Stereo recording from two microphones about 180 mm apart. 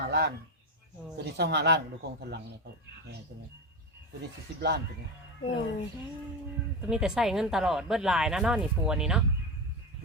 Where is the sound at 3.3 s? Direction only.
60° right (ahead or behind).